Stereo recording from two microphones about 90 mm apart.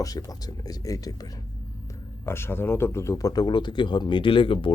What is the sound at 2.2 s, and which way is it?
Speech, 25° left (ahead or behind).